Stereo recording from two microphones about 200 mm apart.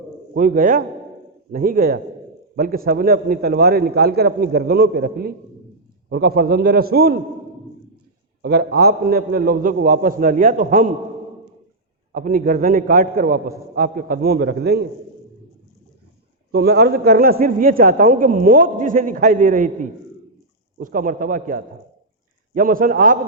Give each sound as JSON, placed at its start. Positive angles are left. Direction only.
{"t": 0.3, "sound": "a man's voice", "side_deg": -40}
{"t": 8.4, "sound": "a man's voice", "side_deg": -55}
{"t": 12.1, "sound": "a man's voice", "side_deg": -45}
{"t": 16.5, "sound": "a man's voice", "side_deg": -50}